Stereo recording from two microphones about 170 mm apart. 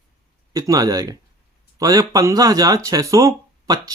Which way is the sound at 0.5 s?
20° right (ahead or behind).